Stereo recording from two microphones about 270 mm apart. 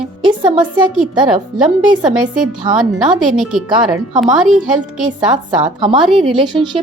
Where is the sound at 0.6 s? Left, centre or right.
Centre.